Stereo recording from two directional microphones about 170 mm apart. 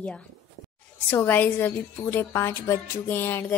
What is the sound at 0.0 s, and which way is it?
Music, 5° left (ahead or behind).